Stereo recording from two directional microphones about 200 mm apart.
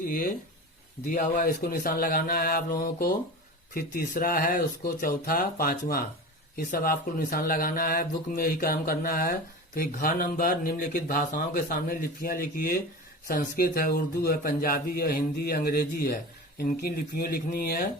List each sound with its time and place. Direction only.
0.0 s speech: 45° left (ahead or behind)